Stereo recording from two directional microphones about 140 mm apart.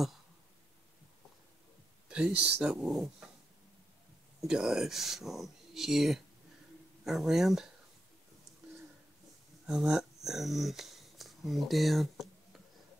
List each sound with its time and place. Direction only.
2.0 s speech: 5° right (ahead or behind)
4.4 s speech: 5° right (ahead or behind)
9.7 s speech: 5° right (ahead or behind)